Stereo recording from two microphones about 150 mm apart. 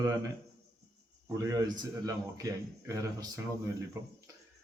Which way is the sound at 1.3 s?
25° right (ahead or behind).